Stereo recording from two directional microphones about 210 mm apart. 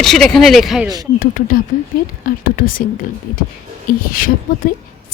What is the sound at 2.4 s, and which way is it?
Speech, 40° left (ahead or behind).